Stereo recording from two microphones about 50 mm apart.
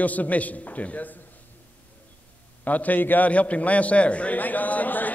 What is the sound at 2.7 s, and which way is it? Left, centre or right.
A man's voice, left.